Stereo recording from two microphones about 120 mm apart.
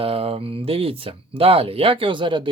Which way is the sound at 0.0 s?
55° right (ahead or behind).